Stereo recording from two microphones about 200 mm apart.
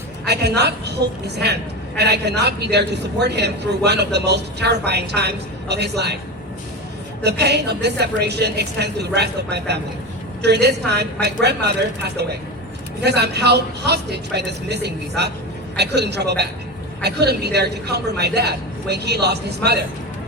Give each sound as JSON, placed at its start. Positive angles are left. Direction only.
{"t": 0.3, "sound": "a man's voice", "side_deg": -55}
{"t": 7.2, "sound": "a man's voice", "side_deg": -55}